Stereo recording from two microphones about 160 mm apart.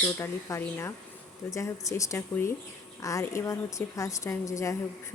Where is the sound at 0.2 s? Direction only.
15° left (ahead or behind).